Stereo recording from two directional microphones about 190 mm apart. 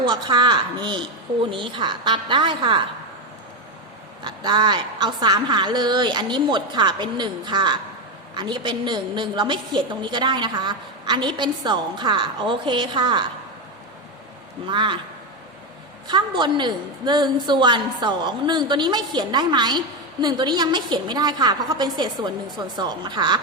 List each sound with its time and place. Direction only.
0.0 s a woman's voice: 25° right (ahead or behind)
4.2 s a woman's voice: 25° right (ahead or behind)
14.7 s a woman's voice: 25° right (ahead or behind)
16.0 s a woman's voice: 25° right (ahead or behind)